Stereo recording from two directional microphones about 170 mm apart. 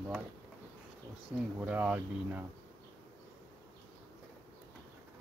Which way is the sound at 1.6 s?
10° right (ahead or behind).